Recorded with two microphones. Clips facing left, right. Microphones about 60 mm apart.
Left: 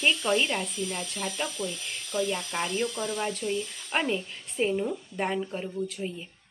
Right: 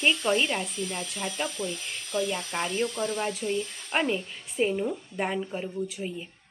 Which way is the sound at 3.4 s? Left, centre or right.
Centre.